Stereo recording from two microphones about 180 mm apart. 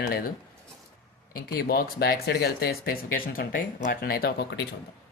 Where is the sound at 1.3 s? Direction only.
55° left (ahead or behind).